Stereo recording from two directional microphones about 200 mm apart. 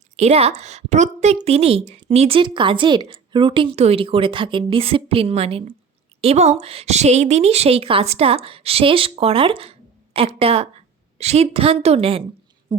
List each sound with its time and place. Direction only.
0.2 s a woman's voice: 30° right (ahead or behind)